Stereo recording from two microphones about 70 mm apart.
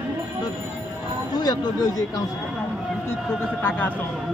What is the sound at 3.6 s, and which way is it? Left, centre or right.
Speech, left.